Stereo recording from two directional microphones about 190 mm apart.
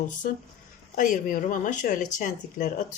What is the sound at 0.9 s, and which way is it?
Speech, 45° left (ahead or behind).